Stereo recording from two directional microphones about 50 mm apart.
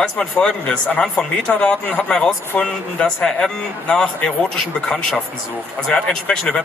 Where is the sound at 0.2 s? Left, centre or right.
Centre.